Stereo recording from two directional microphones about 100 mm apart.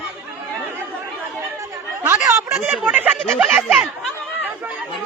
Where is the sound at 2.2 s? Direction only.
25° right (ahead or behind).